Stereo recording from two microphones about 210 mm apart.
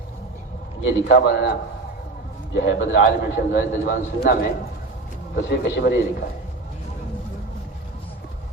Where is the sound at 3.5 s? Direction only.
45° left (ahead or behind).